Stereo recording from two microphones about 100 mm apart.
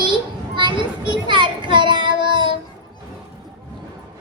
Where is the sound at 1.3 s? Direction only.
55° right (ahead or behind).